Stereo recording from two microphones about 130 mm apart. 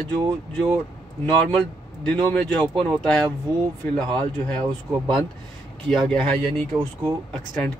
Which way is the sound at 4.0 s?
35° right (ahead or behind).